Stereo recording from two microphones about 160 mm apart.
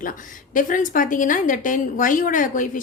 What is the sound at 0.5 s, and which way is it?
A woman's voice, 55° left (ahead or behind).